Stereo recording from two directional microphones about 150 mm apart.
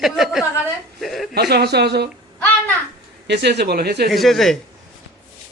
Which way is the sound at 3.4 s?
90° right.